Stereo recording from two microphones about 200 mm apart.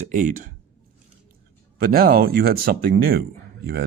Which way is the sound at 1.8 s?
50° right (ahead or behind).